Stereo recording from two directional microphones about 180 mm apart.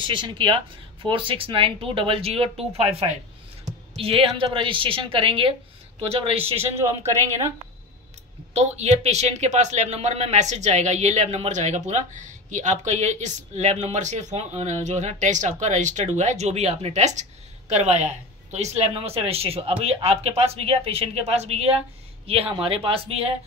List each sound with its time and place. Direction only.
0.0 s a woman's voice: 25° right (ahead or behind)
8.5 s speech: 40° right (ahead or behind)